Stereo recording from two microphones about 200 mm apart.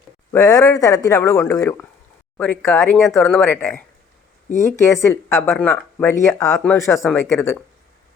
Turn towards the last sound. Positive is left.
turn(degrees=15)  # may be behind; listen again after turning